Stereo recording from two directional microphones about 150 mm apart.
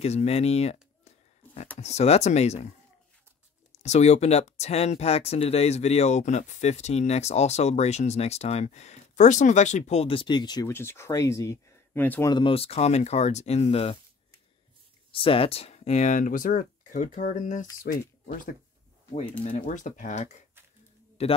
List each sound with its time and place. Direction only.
0.0 s a sound: 45° left (ahead or behind)
1.8 s speech: 45° left (ahead or behind)
3.8 s speech: 50° left (ahead or behind); by 10.7 s 30° left (ahead or behind)
10.7 s speech: 15° left (ahead or behind)
12.3 s speech: 35° left (ahead or behind)
15.0 s speech: 35° left (ahead or behind); by 17.6 s 55° left (ahead or behind)
17.9 s speech: 70° left (ahead or behind)
19.4 s speech: 60° left (ahead or behind)